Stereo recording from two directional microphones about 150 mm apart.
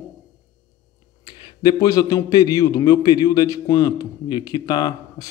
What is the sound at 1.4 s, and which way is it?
A man's voice, 25° left (ahead or behind).